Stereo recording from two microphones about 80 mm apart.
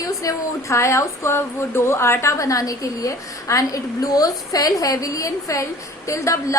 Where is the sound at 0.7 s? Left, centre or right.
Left.